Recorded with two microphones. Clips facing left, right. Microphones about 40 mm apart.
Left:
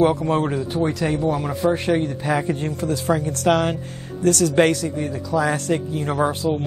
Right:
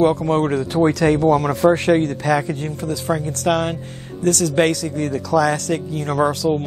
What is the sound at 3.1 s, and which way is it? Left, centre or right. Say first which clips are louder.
Speech: even; right.